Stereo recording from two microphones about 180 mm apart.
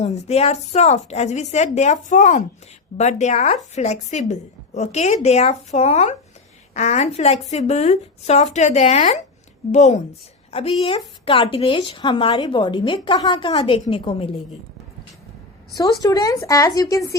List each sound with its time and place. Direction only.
0.0 s a woman's voice: 35° left (ahead or behind)
15.7 s a woman's voice: 20° left (ahead or behind)